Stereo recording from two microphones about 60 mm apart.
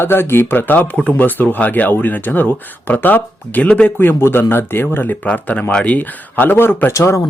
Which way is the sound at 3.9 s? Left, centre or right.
Left.